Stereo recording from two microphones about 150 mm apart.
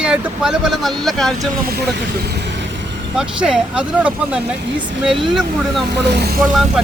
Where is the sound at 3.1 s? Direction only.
5° right (ahead or behind).